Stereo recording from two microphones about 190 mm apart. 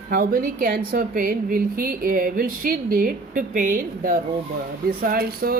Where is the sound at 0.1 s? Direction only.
50° right (ahead or behind).